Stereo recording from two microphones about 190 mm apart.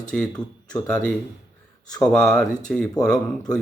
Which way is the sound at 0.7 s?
5° left (ahead or behind).